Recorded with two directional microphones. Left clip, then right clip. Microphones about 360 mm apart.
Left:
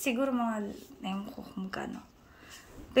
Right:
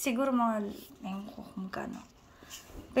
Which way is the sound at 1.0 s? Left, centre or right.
Centre.